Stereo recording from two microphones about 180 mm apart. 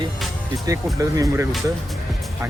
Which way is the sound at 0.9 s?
20° right (ahead or behind).